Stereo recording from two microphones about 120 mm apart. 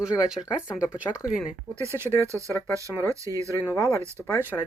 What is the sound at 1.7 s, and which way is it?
Speech, 25° right (ahead or behind).